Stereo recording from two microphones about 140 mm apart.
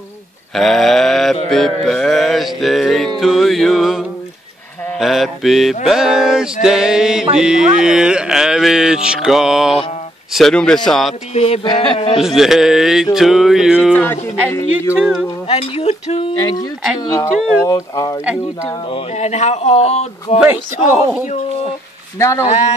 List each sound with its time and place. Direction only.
0.6 s a sound: centre (ahead or behind)
1.9 s mantra: centre (ahead or behind)
3.2 s music: centre (ahead or behind)
4.9 s speech: centre (ahead or behind)
11.3 s a man's voice: 45° left (ahead or behind)
12.2 s speech: centre (ahead or behind)
13.9 s speech: 15° left (ahead or behind)
15.0 s speech: 5° right (ahead or behind)
15.4 s speech: 45° left (ahead or behind)
17.0 s speech: 25° left (ahead or behind)
18.9 s speech: 45° left (ahead or behind)
22.2 s speech: 20° left (ahead or behind)